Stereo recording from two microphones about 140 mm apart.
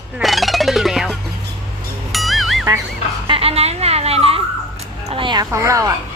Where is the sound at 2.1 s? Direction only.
Centre (ahead or behind).